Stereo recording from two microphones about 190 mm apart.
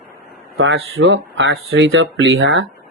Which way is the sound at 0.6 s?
80° right.